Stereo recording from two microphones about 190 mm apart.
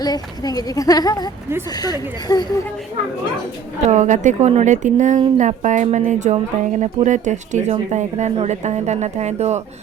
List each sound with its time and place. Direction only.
0.0 s speech: 20° left (ahead or behind)
3.8 s speech: 40° right (ahead or behind)